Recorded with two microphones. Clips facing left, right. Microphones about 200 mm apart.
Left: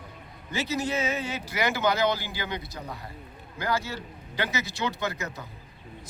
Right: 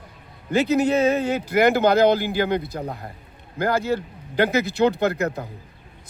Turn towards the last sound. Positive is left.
turn(degrees=-60)  # may be behind; listen again after turning